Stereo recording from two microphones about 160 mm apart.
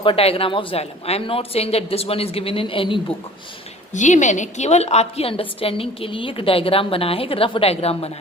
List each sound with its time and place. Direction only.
0.0 s a woman's voice: 35° left (ahead or behind)
3.9 s a woman's voice: 50° left (ahead or behind)